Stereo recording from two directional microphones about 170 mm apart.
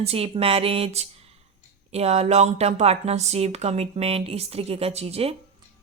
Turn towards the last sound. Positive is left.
turn(degrees=-35)  # may be behind; listen again after turning